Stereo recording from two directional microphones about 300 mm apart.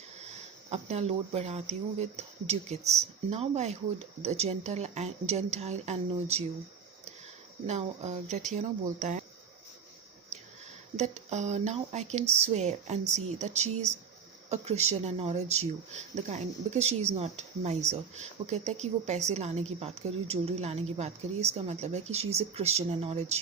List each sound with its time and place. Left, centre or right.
0.7 s speech: right
7.7 s speech: right
10.9 s speech: right